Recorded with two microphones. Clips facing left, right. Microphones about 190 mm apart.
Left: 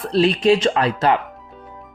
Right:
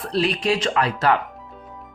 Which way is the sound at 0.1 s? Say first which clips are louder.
Left 6 dB; 25° left (ahead or behind).